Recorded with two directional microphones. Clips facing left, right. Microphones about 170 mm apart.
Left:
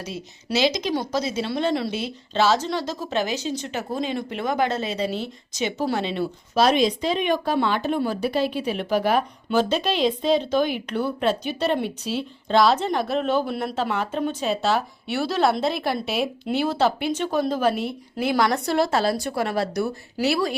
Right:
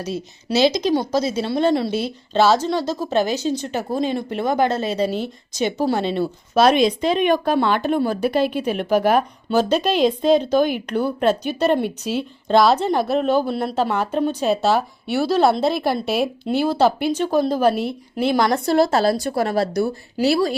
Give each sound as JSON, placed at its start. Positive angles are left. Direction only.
{"t": 0.5, "sound": "speech", "side_deg": -35}
{"t": 6.0, "sound": "speech", "side_deg": -50}